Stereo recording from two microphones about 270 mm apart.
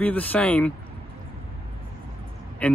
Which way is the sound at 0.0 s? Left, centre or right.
Centre.